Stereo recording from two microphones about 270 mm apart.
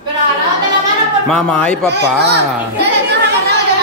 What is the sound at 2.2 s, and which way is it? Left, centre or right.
Children playing, right.